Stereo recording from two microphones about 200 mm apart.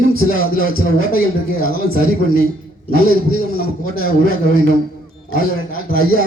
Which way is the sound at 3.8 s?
90° right.